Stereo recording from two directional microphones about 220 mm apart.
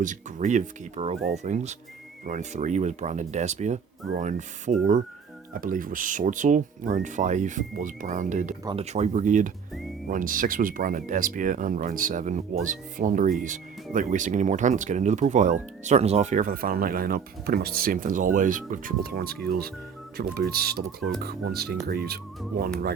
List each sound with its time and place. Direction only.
0.0 s speech: 35° right (ahead or behind)